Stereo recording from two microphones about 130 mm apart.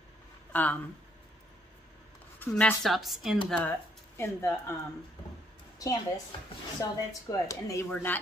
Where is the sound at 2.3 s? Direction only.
10° left (ahead or behind).